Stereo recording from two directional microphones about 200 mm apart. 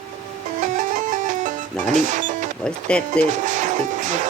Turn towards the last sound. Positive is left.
turn(degrees=-40)  # may be behind; listen again after turning